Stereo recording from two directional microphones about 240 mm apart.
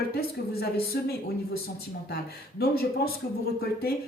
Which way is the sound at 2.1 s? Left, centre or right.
Left.